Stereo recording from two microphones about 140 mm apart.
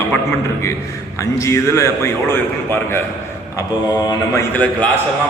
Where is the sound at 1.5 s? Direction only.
20° left (ahead or behind).